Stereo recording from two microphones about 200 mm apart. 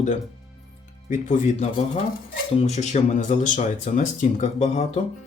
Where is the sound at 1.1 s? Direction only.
40° left (ahead or behind).